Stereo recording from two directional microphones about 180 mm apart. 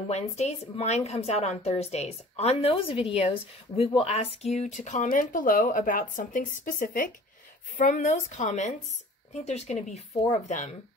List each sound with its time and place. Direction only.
0.1 s a woman's voice: 40° left (ahead or behind)